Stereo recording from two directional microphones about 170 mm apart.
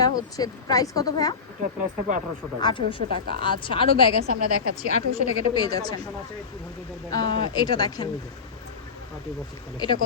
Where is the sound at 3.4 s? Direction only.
30° left (ahead or behind).